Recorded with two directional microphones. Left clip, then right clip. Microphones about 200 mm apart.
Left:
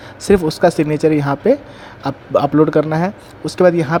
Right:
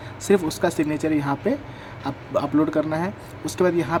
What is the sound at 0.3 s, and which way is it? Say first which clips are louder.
Speech: left 8 dB; 25° left (ahead or behind).